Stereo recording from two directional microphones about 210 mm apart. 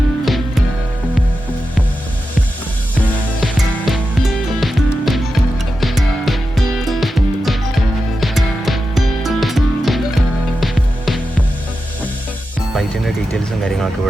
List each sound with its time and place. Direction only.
0.3 s music: centre (ahead or behind)
3.0 s music: centre (ahead or behind)
6.2 s music: centre (ahead or behind)
13.3 s vehicle: centre (ahead or behind)